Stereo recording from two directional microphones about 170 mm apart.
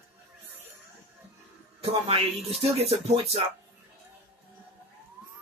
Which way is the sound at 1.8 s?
35° right (ahead or behind).